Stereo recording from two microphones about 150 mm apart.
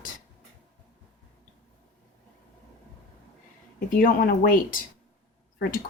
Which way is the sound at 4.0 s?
65° left (ahead or behind).